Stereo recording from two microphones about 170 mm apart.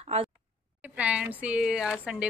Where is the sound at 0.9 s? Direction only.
10° right (ahead or behind).